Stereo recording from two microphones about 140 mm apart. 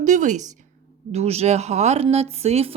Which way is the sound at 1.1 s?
50° right (ahead or behind).